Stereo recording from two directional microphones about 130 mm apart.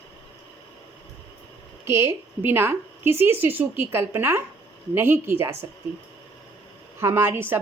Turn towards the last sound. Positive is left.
turn(degrees=-20)  # may be behind; listen again after turning